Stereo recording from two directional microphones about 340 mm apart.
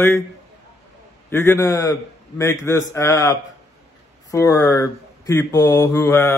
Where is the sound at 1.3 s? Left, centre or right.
Centre.